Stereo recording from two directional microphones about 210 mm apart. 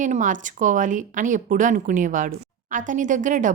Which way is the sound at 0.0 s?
35° right (ahead or behind).